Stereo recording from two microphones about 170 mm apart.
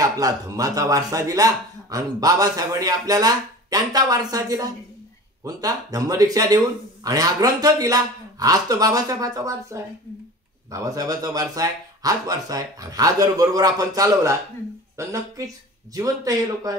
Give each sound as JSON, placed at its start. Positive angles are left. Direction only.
{"t": 0.0, "sound": "a woman's voice", "side_deg": -20}